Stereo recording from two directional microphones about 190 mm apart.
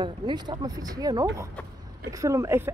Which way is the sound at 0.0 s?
25° right (ahead or behind).